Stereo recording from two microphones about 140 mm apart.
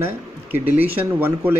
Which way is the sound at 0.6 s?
45° right (ahead or behind).